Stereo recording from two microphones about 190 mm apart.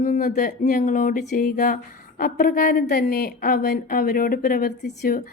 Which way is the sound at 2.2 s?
50° left (ahead or behind).